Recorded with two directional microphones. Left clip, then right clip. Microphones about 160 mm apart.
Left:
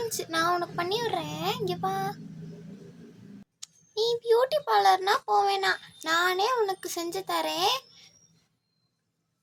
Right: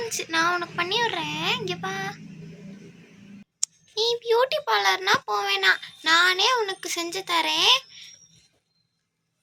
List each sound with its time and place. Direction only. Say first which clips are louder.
0.1 s a child's voice: right 5 dB; 40° left (ahead or behind)
3.6 s a sound: right 16 dB; 5° left (ahead or behind)
3.9 s a child's voice: right 2 dB; 30° left (ahead or behind)